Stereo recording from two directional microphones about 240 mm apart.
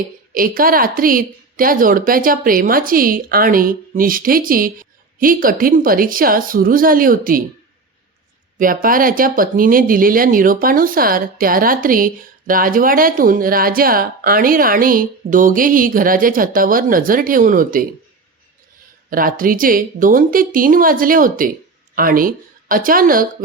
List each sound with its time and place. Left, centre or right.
0.3 s speech: right
8.5 s speech: right
19.1 s speech: right